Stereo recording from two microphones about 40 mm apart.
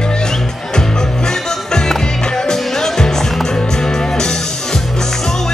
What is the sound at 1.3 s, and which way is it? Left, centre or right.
Music, centre.